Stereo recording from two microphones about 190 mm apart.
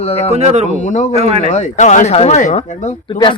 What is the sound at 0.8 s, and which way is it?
Speech, 40° left (ahead or behind).